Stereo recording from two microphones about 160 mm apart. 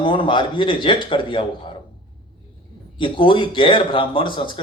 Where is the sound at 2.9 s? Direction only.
30° left (ahead or behind).